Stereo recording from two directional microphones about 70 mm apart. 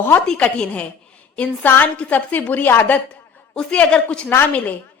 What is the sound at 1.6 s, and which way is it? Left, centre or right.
A woman's voice, left.